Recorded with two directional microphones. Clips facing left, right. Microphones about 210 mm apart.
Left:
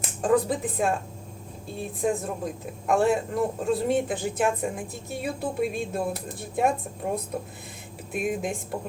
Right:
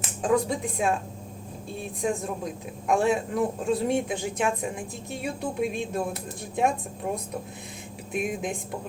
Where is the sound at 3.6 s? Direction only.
Centre (ahead or behind).